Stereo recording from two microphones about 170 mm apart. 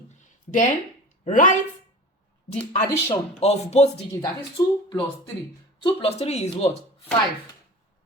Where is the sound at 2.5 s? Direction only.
35° left (ahead or behind).